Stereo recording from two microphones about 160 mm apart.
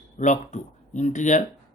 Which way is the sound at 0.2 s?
50° left (ahead or behind).